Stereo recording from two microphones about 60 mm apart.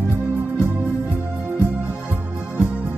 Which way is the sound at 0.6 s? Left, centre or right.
Right.